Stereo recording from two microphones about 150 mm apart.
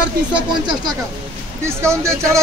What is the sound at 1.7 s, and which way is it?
Speech, 20° right (ahead or behind).